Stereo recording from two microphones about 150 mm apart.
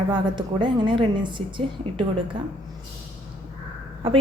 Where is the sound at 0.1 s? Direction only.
30° right (ahead or behind).